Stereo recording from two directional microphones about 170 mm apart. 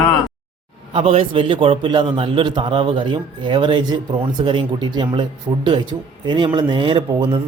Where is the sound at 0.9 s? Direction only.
30° right (ahead or behind).